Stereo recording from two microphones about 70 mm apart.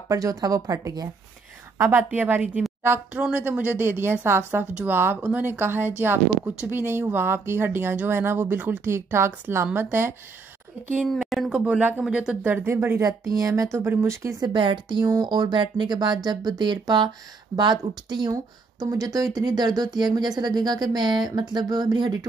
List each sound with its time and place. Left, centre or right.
0.1 s speech: right
2.0 s speech: right
8.9 s speech: right
11.1 s speech: centre
12.4 s speech: right
13.0 s speech: right
13.7 s speech: right
14.4 s speech: right
18.3 s speech: right